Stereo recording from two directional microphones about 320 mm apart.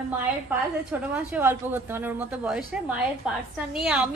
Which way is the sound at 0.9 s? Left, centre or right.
Centre.